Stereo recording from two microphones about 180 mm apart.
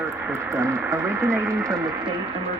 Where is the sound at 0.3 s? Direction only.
15° right (ahead or behind).